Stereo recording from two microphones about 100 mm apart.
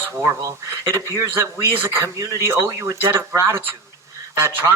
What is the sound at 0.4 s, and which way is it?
Speech, 35° right (ahead or behind).